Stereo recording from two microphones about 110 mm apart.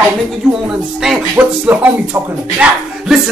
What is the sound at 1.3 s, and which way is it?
A woman's voice, 15° right (ahead or behind).